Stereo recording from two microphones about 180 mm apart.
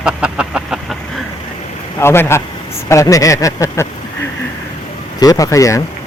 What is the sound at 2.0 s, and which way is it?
Speech, 15° left (ahead or behind).